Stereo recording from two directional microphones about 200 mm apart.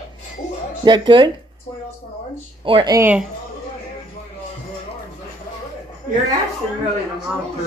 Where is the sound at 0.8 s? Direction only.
25° right (ahead or behind).